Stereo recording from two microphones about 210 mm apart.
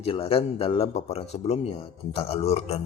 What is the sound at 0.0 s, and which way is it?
Speech, 25° left (ahead or behind).